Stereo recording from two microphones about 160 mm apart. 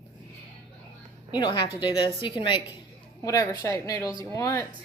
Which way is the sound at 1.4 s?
30° left (ahead or behind).